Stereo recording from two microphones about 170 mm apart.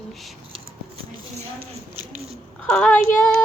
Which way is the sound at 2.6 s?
10° left (ahead or behind).